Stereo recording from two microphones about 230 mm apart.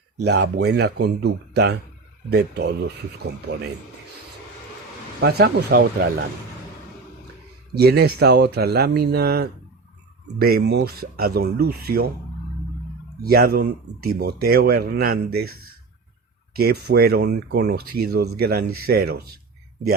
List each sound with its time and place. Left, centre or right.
0.3 s speech: right
5.2 s speech: right
7.7 s speech: right
13.2 s speech: right
16.6 s speech: right